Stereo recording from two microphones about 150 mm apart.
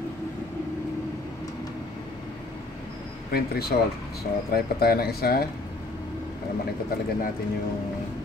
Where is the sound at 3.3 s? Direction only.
90° left.